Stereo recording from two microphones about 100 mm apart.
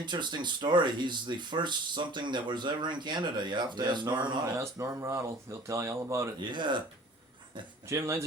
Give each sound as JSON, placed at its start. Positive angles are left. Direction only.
{"t": 0.0, "sound": "speech", "side_deg": -50}
{"t": 4.5, "sound": "speech", "side_deg": -30}
{"t": 6.4, "sound": "speech", "side_deg": -50}
{"t": 7.9, "sound": "speech", "side_deg": -30}